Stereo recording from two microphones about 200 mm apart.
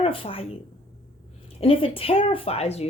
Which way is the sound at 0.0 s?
25° left (ahead or behind).